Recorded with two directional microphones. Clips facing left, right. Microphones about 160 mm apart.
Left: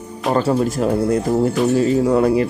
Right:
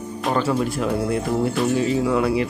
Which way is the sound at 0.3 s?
40° left (ahead or behind).